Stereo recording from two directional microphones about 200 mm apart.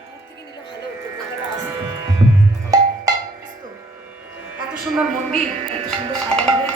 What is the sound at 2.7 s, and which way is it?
Music, 15° right (ahead or behind).